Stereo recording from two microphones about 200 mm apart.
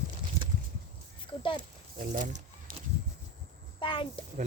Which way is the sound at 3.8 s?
25° left (ahead or behind).